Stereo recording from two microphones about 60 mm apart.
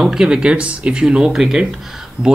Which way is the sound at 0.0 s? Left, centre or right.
Centre.